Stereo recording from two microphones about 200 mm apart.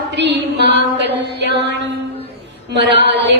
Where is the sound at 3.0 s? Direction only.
60° right (ahead or behind).